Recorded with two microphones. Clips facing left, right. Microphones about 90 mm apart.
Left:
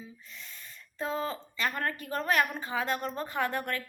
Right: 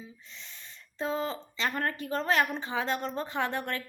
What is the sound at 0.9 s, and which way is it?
A woman's voice, 25° right (ahead or behind).